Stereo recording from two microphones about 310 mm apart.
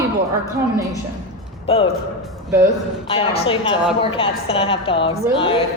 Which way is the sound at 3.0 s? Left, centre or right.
Centre.